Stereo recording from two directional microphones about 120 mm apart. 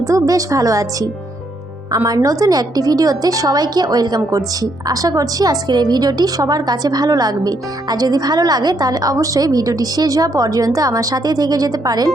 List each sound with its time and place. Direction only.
0.0 s a woman's voice: 25° right (ahead or behind)
2.0 s a woman's voice: 30° right (ahead or behind)